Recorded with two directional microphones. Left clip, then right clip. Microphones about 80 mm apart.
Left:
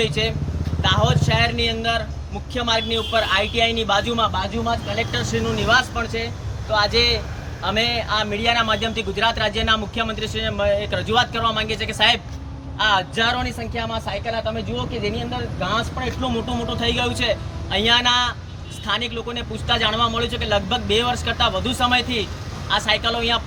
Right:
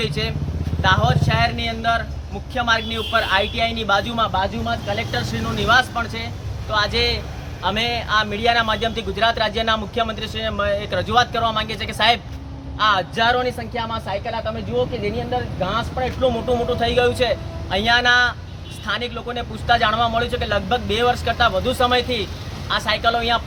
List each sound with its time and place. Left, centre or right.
0.0 s a man's voice: right
5.5 s speech: centre
6.7 s a man's voice: centre; by 23.4 s right